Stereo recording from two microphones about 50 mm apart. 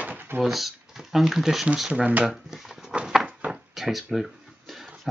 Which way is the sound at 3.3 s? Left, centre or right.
Right.